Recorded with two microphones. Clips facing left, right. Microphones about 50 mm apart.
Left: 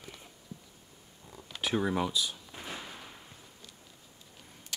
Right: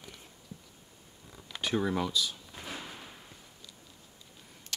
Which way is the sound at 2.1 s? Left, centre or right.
Centre.